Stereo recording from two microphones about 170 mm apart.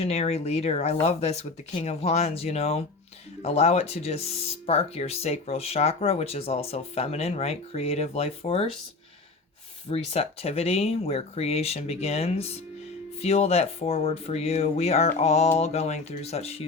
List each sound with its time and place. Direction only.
0.0 s speech: 40° left (ahead or behind)
9.9 s speech: 35° left (ahead or behind)